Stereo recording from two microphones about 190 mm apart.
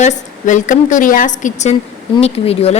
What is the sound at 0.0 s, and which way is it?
Speech, 40° left (ahead or behind).